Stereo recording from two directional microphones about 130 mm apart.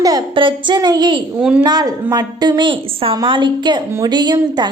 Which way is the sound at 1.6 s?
30° right (ahead or behind).